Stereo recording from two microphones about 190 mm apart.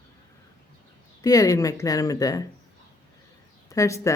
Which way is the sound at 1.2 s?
20° left (ahead or behind).